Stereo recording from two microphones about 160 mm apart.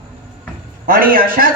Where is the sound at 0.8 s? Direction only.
65° right (ahead or behind).